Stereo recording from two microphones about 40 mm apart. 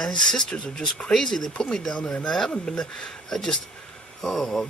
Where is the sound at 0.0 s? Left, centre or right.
Centre.